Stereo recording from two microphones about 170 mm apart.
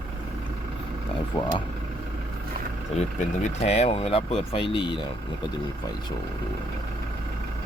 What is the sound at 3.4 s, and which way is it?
Speech, 40° left (ahead or behind).